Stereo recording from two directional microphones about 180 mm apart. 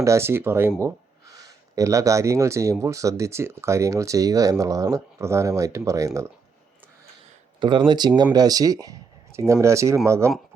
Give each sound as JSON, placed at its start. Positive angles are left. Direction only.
{"t": 0.0, "sound": "speech", "side_deg": -15}
{"t": 7.6, "sound": "speech", "side_deg": -25}